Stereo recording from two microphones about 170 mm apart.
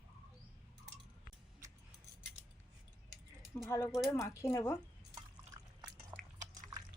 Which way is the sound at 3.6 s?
15° left (ahead or behind).